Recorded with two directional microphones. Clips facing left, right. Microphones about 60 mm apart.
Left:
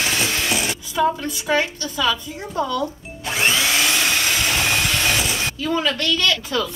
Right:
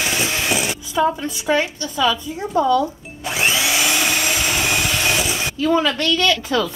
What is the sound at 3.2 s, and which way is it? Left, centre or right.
Vacuum cleaner, centre.